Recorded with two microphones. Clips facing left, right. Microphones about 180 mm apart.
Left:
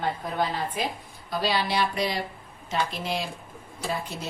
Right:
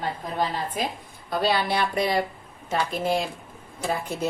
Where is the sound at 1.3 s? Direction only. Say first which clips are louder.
Right 3 dB; 55° right (ahead or behind).